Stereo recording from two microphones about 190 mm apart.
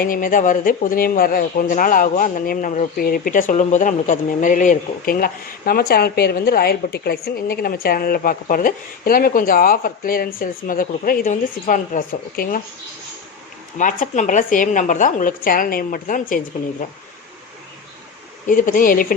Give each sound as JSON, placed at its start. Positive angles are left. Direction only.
{"t": 0.0, "sound": "speech", "side_deg": 45}
{"t": 13.7, "sound": "speech", "side_deg": 40}
{"t": 18.4, "sound": "speech", "side_deg": 45}